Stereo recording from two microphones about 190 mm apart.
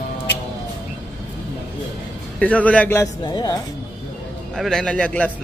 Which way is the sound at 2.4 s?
5° left (ahead or behind).